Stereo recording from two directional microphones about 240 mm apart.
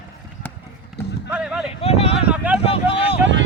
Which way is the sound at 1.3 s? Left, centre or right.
Centre.